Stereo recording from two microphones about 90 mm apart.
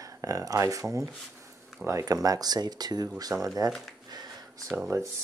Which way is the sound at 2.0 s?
45° right (ahead or behind).